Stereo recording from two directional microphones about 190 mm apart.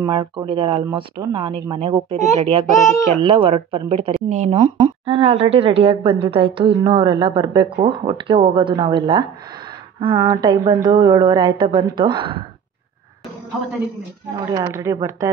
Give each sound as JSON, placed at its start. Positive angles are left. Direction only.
{"t": 0.0, "sound": "a woman's voice", "side_deg": -25}
{"t": 14.5, "sound": "speech", "side_deg": -15}